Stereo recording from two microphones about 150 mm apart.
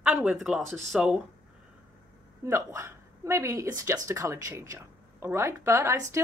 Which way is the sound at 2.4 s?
20° right (ahead or behind).